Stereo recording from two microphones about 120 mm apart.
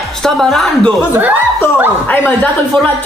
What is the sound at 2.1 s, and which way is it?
Speech, 15° left (ahead or behind).